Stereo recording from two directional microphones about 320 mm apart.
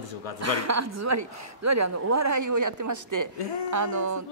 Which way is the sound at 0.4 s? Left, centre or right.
Right.